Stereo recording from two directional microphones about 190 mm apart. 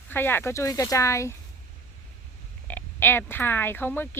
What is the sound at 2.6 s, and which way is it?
Speech, 10° left (ahead or behind).